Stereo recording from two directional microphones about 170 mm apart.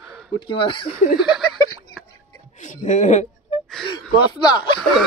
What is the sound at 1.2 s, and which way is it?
Speech, centre (ahead or behind).